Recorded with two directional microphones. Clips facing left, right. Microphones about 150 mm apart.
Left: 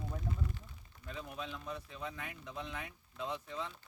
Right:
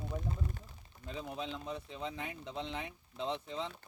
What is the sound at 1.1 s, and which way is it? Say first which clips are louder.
Speech: right 3 dB; 25° right (ahead or behind).